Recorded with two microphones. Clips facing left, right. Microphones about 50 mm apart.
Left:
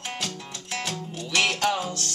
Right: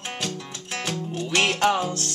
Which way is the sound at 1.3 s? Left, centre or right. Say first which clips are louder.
Right 3 dB; right.